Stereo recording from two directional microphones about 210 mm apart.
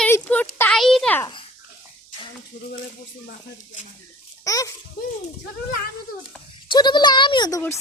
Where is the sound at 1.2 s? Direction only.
20° left (ahead or behind).